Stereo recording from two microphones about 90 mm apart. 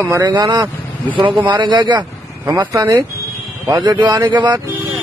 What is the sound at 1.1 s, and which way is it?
Speech, 65° right (ahead or behind).